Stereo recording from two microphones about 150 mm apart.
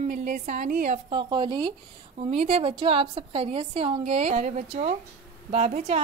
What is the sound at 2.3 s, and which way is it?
A woman's voice, 40° right (ahead or behind).